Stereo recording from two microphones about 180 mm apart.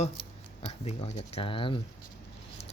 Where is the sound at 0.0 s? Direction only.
35° left (ahead or behind).